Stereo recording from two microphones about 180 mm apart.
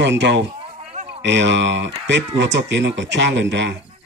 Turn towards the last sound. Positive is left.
turn(degrees=-75)  # may be behind; listen again after turning